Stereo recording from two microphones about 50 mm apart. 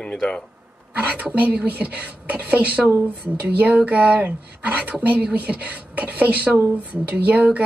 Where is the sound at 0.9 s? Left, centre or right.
Right.